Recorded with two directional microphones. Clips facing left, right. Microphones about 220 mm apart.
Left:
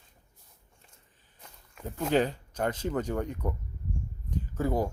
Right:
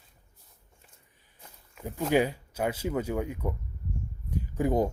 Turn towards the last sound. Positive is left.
turn(degrees=-20)  # may be behind; listen again after turning